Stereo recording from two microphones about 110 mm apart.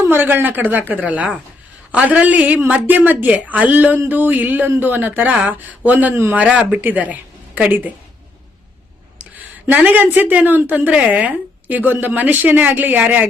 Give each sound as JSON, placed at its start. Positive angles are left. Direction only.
{"t": 0.0, "sound": "a woman's voice", "side_deg": -20}
{"t": 9.6, "sound": "a woman's voice", "side_deg": -15}